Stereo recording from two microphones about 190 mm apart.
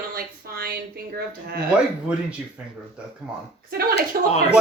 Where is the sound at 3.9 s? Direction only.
35° left (ahead or behind).